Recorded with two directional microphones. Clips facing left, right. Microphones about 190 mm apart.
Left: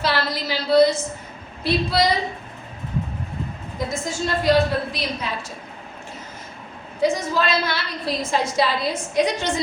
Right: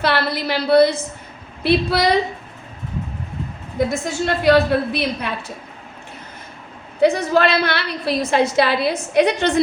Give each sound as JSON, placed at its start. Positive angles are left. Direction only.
{"t": 0.0, "sound": "a woman's voice", "side_deg": -60}
{"t": 3.8, "sound": "a woman's voice", "side_deg": -65}
{"t": 7.0, "sound": "a woman's voice", "side_deg": -65}